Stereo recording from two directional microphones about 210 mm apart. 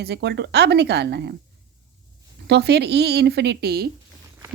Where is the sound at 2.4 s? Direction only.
50° right (ahead or behind).